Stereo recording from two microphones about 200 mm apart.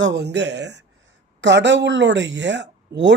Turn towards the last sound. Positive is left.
turn(degrees=-60)  # may be behind; listen again after turning